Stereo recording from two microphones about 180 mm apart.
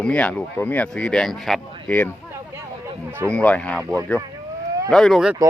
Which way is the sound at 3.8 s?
15° right (ahead or behind).